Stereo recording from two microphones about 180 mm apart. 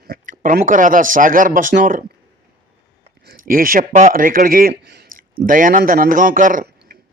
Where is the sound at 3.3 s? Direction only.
50° right (ahead or behind).